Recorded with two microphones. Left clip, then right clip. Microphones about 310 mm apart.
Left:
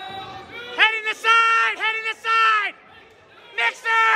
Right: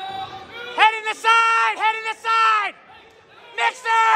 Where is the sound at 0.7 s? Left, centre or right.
Centre.